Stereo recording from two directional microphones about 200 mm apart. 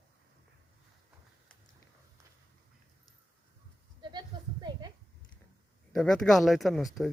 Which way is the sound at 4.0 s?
20° right (ahead or behind).